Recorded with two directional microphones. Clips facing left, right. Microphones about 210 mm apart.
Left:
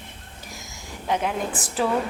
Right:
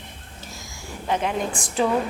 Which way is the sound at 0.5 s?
20° left (ahead or behind).